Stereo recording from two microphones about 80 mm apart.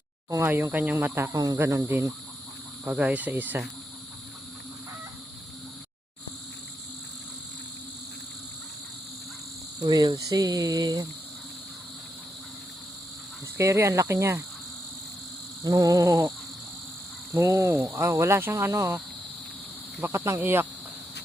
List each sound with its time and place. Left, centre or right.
0.3 s speech: right
0.5 s cricket: right
1.3 s speech: right
1.5 s cricket: right
2.9 s cricket: centre
9.8 s speech: right
13.6 s cricket: right
15.6 s speech: right
17.3 s cricket: right